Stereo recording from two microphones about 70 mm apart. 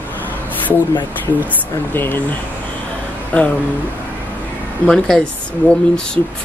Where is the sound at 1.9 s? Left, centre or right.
Left.